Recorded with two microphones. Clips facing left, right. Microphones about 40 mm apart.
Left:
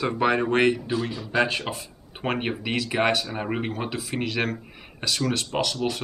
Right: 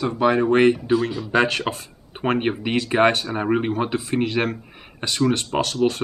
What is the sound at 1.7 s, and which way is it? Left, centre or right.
Speech, right.